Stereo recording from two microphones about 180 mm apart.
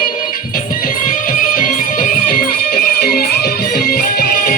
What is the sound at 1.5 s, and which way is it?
Music, 50° left (ahead or behind).